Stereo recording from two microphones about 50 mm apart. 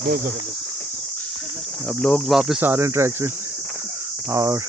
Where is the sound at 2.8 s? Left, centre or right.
Right.